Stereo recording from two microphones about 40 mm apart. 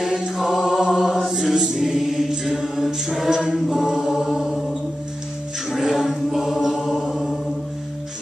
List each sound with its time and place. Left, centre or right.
0.4 s choir: centre
0.7 s chant: centre
1.5 s choir: centre
5.7 s a capella: centre
6.9 s chant: centre